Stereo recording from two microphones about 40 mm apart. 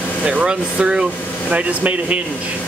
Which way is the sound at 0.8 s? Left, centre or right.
Right.